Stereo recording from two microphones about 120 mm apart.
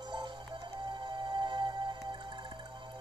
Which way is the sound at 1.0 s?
40° right (ahead or behind).